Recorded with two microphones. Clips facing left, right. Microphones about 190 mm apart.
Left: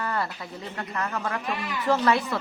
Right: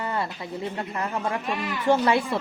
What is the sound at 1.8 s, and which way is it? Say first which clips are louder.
Speech: right 2 dB; 25° right (ahead or behind).